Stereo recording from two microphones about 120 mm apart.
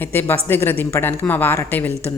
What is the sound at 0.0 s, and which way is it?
A woman's voice, 15° left (ahead or behind).